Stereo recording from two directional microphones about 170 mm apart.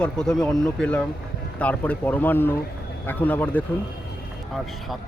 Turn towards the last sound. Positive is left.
turn(degrees=10)  # may be behind; listen again after turning